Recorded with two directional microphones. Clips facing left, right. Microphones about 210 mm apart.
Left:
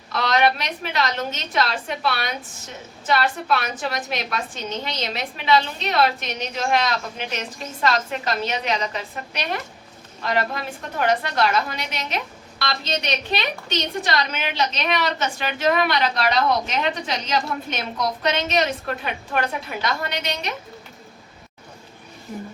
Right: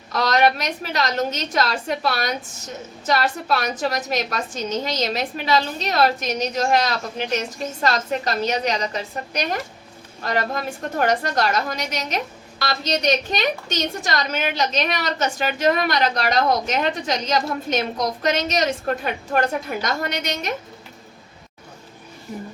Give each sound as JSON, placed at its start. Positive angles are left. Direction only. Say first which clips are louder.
{"t": 0.1, "sound": "a woman's voice", "louder": "right 2 dB", "side_deg": -40}